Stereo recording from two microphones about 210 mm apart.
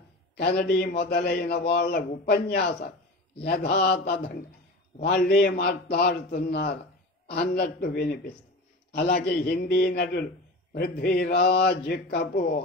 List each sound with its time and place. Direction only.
0.4 s a man's voice: 45° left (ahead or behind)